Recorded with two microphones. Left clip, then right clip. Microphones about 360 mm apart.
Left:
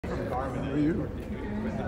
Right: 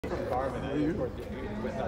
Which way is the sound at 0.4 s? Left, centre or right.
Right.